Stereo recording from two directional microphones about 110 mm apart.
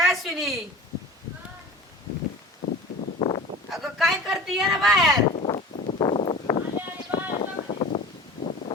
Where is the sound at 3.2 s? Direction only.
35° left (ahead or behind).